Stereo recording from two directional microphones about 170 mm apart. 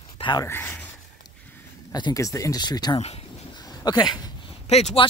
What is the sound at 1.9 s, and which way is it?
Speech, 20° left (ahead or behind).